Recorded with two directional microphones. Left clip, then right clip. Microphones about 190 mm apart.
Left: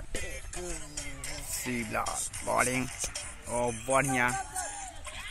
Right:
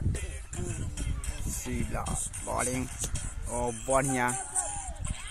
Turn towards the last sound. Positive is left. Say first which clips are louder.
# left 1 dB
turn(degrees=-20)  # may be behind; listen again after turning